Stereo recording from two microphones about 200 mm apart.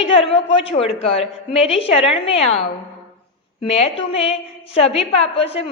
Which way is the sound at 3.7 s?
30° left (ahead or behind).